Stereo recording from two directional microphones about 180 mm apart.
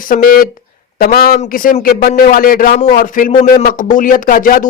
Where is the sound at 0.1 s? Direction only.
55° left (ahead or behind).